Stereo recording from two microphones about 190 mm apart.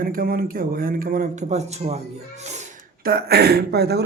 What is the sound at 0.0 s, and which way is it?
A man's voice, 50° right (ahead or behind).